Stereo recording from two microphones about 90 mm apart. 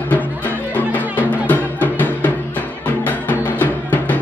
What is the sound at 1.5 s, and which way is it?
Music, 20° left (ahead or behind).